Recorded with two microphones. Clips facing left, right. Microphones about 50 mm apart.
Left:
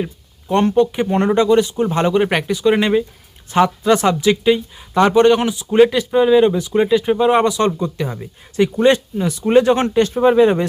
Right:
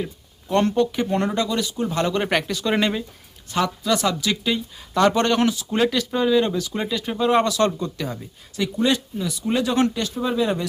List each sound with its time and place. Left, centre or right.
0.0 s a sound: left
0.8 s speech: left
2.1 s speech: centre
3.5 s speech: left
8.5 s speech: left